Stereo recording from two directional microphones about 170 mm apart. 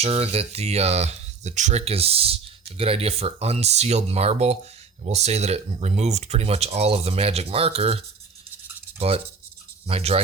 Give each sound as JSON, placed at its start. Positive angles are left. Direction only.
{"t": 0.0, "sound": "speech", "side_deg": -35}